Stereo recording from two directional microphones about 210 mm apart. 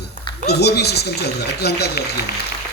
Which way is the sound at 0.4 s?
50° left (ahead or behind).